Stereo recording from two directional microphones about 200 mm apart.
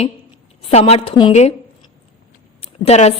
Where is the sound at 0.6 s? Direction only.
30° left (ahead or behind).